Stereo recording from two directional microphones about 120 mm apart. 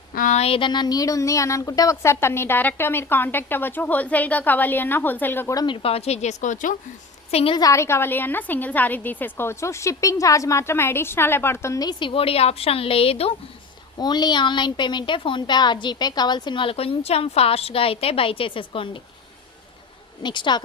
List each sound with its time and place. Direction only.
0.3 s speech: 60° left (ahead or behind)
0.7 s a woman's voice: 35° left (ahead or behind); by 5.5 s 15° left (ahead or behind)
5.5 s speech: 45° left (ahead or behind); by 6.7 s 90° left
7.3 s a woman's voice: 55° left (ahead or behind)
7.5 s a woman's voice: 30° left (ahead or behind); by 13.3 s 55° left (ahead or behind)
14.0 s a woman's voice: 35° left (ahead or behind)
20.2 s speech: 40° left (ahead or behind)